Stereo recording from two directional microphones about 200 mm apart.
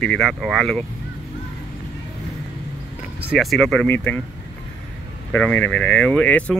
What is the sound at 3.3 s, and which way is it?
Speech, centre (ahead or behind).